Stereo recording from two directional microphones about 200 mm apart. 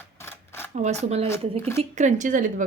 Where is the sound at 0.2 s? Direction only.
10° left (ahead or behind).